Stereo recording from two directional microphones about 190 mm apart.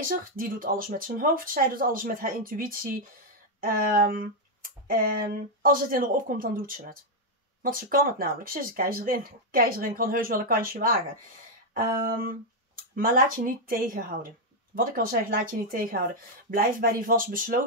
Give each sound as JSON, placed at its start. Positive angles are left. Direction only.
{"t": 0.1, "sound": "speech", "side_deg": -50}